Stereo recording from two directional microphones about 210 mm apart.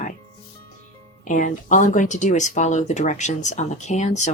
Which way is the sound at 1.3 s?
35° left (ahead or behind).